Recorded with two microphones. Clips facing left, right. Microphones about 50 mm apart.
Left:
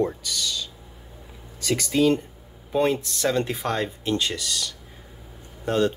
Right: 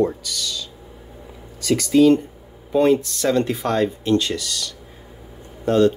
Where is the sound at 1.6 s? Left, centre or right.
Left.